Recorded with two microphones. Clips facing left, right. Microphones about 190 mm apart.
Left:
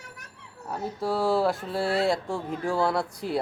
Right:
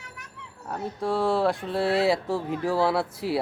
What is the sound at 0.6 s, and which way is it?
Speech, centre (ahead or behind).